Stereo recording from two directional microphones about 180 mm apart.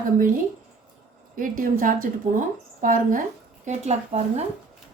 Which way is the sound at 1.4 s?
50° right (ahead or behind).